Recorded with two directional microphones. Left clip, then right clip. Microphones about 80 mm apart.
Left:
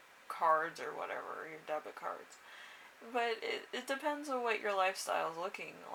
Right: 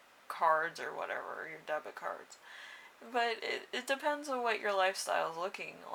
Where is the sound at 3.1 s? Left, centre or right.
Right.